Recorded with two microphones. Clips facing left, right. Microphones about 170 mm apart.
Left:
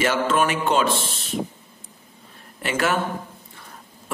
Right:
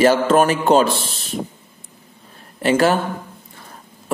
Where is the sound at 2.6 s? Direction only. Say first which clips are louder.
Right 8 dB; 35° right (ahead or behind).